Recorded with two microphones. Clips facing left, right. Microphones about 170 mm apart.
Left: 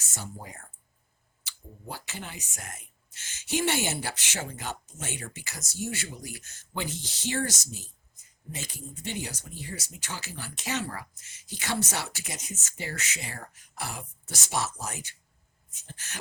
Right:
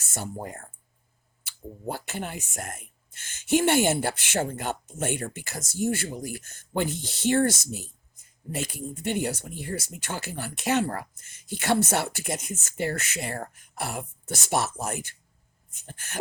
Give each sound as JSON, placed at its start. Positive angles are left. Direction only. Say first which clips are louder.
{"t": 0.0, "sound": "speech", "louder": "right 7 dB", "side_deg": -55}